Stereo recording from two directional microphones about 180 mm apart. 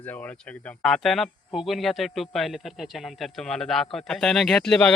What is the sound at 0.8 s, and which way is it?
A man's voice, 5° left (ahead or behind).